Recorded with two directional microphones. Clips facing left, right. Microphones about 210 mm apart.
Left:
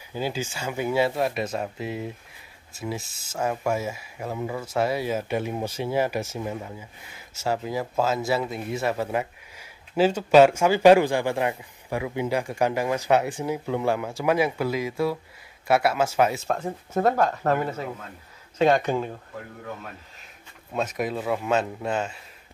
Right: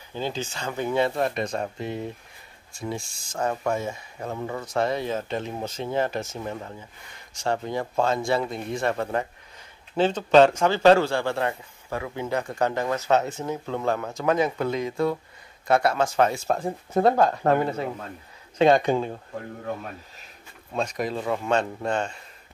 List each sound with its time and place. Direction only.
0.1 s speech: 10° left (ahead or behind)
16.9 s speech: 30° right (ahead or behind)
18.9 s speech: 25° right (ahead or behind)
20.7 s speech: 5° left (ahead or behind)